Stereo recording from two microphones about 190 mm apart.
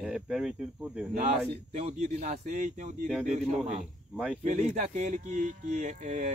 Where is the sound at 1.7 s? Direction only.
35° right (ahead or behind).